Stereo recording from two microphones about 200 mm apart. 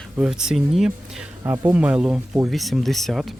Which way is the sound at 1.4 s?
15° right (ahead or behind).